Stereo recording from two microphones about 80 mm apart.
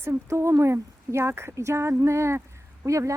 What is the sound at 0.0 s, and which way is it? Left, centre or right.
Speech, right.